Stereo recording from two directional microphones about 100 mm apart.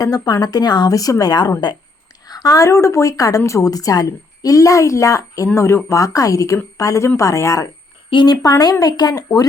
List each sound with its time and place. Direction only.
0.0 s a woman's voice: 40° left (ahead or behind)
8.1 s a woman's voice: 45° left (ahead or behind)